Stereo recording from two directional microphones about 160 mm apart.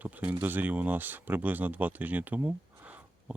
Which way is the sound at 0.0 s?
10° right (ahead or behind).